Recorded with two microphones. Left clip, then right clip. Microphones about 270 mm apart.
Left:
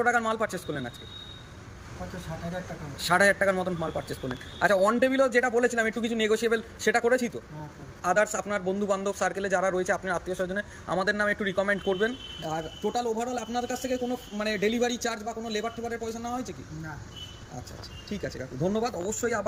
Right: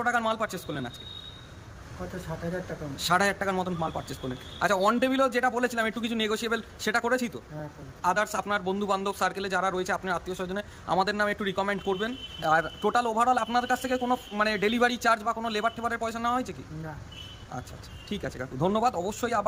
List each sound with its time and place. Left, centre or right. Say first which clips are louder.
0.0 s a man's voice: left 1 dB; centre
3.1 s a man's voice: left 3 dB; centre
12.5 s speech: right 7 dB; right
13.0 s a man's voice: right 7 dB; centre
18.1 s a man's voice: right 1 dB; centre